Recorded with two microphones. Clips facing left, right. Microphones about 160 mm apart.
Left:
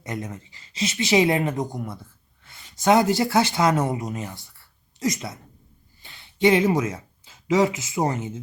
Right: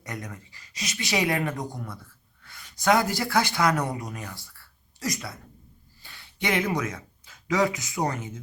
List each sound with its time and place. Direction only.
0.0 s speech: 20° left (ahead or behind)